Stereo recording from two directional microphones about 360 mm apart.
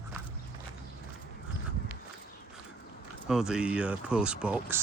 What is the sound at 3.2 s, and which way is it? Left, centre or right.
Speech, centre.